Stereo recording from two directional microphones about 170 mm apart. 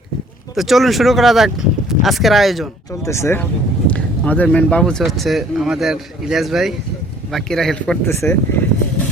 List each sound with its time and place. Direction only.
0.5 s speech: centre (ahead or behind)
3.0 s speech: 15° left (ahead or behind)
8.0 s speech: 15° left (ahead or behind)